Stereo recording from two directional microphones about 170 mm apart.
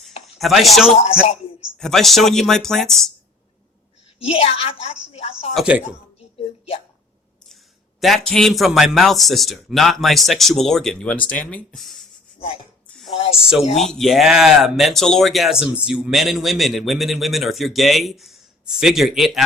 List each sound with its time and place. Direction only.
0.3 s speech: centre (ahead or behind)
4.2 s a woman's voice: 35° left (ahead or behind)
5.5 s speech: 5° right (ahead or behind)
8.0 s speech: centre (ahead or behind)
13.1 s speech: 35° left (ahead or behind)
13.4 s speech: 5° right (ahead or behind)